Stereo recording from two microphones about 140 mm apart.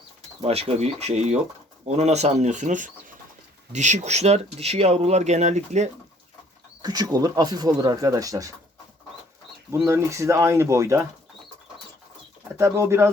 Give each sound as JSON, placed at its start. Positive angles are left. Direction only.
{"t": 0.4, "sound": "speech", "side_deg": -45}
{"t": 6.8, "sound": "speech", "side_deg": -30}
{"t": 9.8, "sound": "speech", "side_deg": -20}
{"t": 12.5, "sound": "speech", "side_deg": -20}